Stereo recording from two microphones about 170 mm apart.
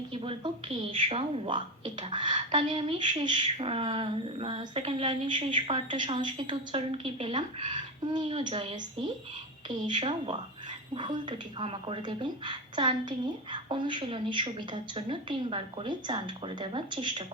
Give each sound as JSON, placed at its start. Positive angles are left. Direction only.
{"t": 0.1, "sound": "a woman's voice", "side_deg": -30}